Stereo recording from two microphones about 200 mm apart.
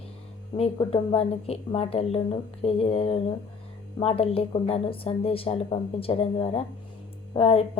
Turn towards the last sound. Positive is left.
turn(degrees=30)  # may be behind; listen again after turning